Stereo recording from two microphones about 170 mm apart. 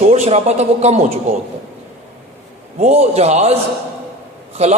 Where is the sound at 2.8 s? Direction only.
40° right (ahead or behind).